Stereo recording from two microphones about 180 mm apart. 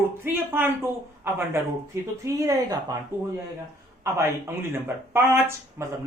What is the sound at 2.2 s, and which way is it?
Speech, 20° right (ahead or behind).